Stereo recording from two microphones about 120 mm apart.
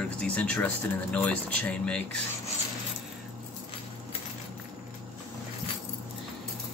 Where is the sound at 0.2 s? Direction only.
10° left (ahead or behind).